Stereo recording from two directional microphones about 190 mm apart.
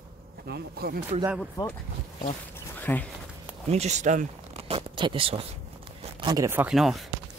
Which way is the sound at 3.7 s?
35° right (ahead or behind).